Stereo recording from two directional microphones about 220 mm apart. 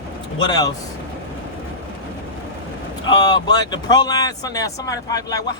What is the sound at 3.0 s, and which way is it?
Speech, 20° left (ahead or behind).